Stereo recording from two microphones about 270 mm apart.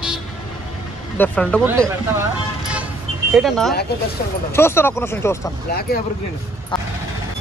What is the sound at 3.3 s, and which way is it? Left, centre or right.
Speech, centre.